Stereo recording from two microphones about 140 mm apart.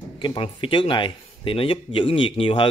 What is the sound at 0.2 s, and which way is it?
A man's voice, 35° left (ahead or behind).